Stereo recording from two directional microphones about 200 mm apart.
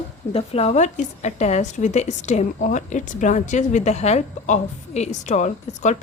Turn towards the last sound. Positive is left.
turn(degrees=35)  # may be behind; listen again after turning